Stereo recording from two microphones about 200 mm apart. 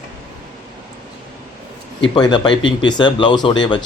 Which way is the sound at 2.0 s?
25° left (ahead or behind).